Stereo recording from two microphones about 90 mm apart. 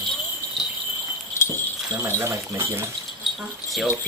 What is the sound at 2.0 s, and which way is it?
Speech, 30° right (ahead or behind).